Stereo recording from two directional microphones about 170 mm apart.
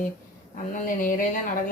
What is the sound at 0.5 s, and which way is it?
Speech, 50° left (ahead or behind).